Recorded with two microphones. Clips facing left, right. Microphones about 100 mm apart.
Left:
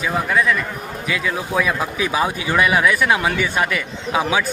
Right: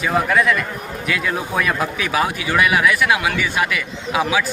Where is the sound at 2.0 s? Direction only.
25° left (ahead or behind).